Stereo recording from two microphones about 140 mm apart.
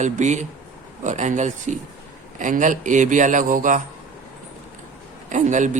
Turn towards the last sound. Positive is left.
turn(degrees=-60)  # may be behind; listen again after turning